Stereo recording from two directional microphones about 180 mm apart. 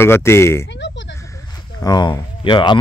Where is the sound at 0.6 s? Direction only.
80° left.